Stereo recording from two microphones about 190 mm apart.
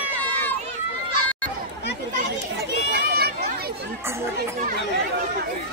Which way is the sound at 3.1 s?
55° right (ahead or behind).